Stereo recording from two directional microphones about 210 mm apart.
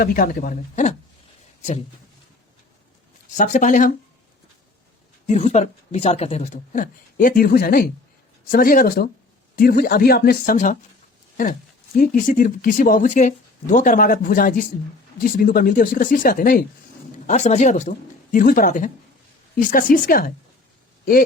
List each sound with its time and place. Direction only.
0.0 s speech: 45° left (ahead or behind)
3.3 s speech: 35° left (ahead or behind)
5.3 s speech: 30° left (ahead or behind)
11.9 s speech: 40° left (ahead or behind)
17.2 s speech: 30° left (ahead or behind)